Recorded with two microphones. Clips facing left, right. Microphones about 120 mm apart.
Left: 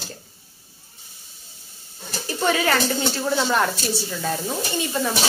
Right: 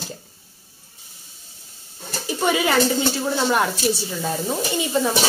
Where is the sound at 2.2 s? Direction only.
10° right (ahead or behind).